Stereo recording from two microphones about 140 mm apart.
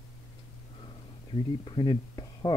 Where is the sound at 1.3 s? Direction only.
35° left (ahead or behind).